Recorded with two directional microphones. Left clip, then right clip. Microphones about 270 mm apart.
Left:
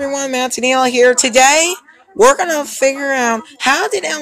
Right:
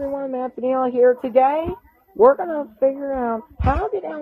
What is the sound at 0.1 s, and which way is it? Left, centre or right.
Speech, left.